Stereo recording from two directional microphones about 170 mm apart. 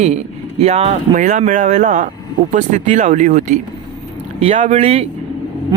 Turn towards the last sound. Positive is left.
turn(degrees=-35)  # may be behind; listen again after turning